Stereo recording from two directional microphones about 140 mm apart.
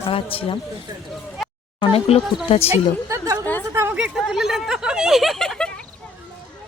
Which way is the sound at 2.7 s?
20° right (ahead or behind).